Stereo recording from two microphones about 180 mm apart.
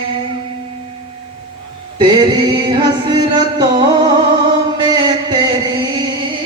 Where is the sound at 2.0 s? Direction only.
25° right (ahead or behind).